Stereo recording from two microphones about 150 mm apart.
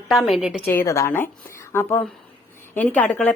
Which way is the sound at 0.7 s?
15° left (ahead or behind).